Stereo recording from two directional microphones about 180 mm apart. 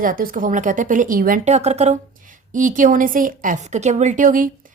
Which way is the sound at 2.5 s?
45° right (ahead or behind).